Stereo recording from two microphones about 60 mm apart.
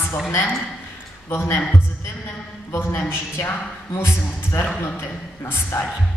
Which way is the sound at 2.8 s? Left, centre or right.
Left.